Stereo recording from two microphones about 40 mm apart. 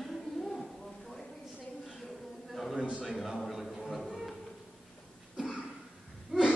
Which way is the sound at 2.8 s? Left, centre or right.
Right.